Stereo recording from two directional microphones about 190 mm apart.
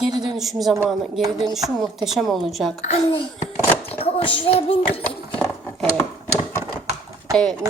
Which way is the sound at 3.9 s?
30° left (ahead or behind).